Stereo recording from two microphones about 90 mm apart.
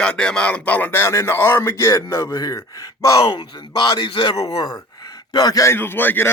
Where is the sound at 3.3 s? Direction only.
55° left (ahead or behind).